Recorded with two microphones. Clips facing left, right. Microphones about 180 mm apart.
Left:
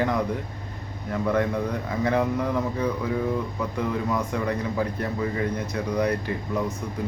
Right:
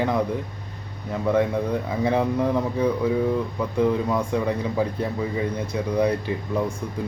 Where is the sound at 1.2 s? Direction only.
10° right (ahead or behind).